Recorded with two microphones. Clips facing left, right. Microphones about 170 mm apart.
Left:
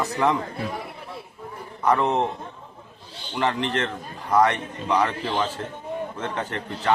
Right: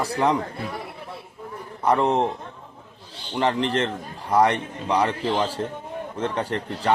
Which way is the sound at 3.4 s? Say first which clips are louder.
Right 2 dB; 35° right (ahead or behind).